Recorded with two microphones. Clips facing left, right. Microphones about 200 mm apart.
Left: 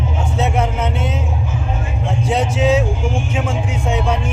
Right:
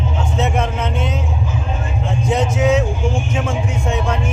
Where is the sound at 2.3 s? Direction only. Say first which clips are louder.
Even; 10° left (ahead or behind).